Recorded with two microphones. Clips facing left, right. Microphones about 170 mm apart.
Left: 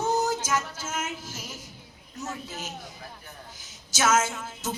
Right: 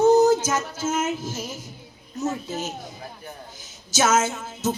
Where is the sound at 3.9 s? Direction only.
25° right (ahead or behind).